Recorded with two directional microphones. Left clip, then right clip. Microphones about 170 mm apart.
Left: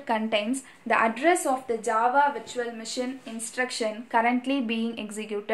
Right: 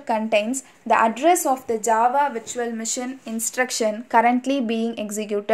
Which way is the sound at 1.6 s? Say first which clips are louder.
Right 7 dB; 50° right (ahead or behind).